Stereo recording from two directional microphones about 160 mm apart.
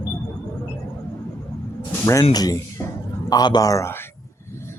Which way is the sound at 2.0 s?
20° left (ahead or behind).